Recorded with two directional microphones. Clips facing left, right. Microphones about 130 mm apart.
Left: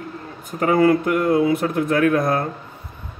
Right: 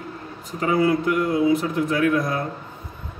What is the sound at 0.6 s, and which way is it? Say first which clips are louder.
A man's voice: left 4 dB; 50° left (ahead or behind).